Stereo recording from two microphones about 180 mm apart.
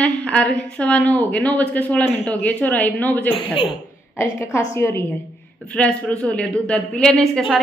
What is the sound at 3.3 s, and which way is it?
Speech, 30° left (ahead or behind).